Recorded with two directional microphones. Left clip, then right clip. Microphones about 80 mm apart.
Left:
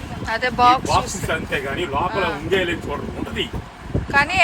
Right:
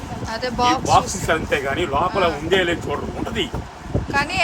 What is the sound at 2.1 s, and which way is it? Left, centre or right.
Speech, right.